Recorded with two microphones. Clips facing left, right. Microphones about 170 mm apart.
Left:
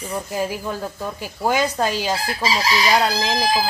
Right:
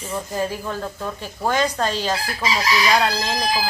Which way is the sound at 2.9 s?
10° left (ahead or behind).